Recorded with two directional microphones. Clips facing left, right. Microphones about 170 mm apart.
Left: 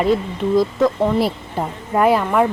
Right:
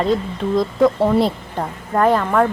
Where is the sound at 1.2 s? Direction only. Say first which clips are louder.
Right 1 dB; 10° left (ahead or behind).